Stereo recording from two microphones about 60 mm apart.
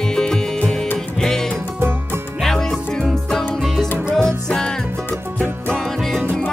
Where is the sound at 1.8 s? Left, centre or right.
Right.